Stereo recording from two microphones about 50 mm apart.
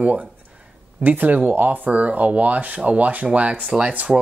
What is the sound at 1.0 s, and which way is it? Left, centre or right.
Speech, right.